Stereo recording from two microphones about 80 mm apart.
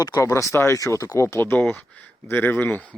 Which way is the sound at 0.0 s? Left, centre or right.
Left.